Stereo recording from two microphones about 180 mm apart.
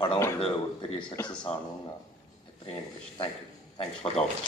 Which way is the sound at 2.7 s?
35° left (ahead or behind).